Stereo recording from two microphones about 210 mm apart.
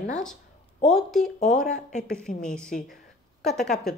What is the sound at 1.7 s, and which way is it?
Speech, 35° left (ahead or behind).